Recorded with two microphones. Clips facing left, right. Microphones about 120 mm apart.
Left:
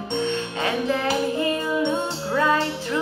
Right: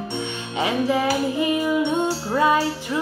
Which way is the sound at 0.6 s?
15° right (ahead or behind).